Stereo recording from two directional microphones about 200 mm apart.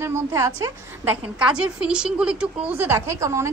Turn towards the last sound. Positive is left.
turn(degrees=-15)  # may be behind; listen again after turning